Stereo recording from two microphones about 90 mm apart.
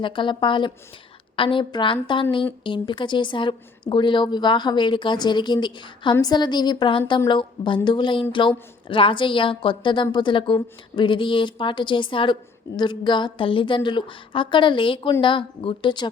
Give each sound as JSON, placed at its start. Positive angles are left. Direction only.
{"t": 0.0, "sound": "a woman's voice", "side_deg": 60}
{"t": 8.9, "sound": "a woman's voice", "side_deg": 75}